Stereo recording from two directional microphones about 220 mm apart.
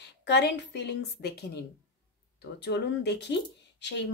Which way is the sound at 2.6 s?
50° left (ahead or behind).